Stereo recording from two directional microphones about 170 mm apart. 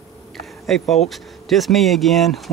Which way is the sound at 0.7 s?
Centre (ahead or behind).